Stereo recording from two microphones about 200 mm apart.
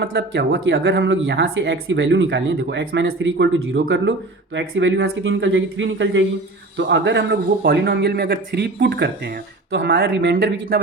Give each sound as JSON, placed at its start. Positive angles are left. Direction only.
{"t": 0.0, "sound": "a man's voice", "side_deg": -60}
{"t": 10.1, "sound": "speech", "side_deg": -70}
{"t": 10.3, "sound": "a man's voice", "side_deg": -50}